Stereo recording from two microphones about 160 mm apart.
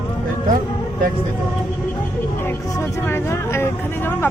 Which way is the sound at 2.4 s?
15° left (ahead or behind).